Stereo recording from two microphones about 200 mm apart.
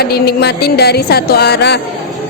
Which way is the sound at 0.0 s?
50° left (ahead or behind).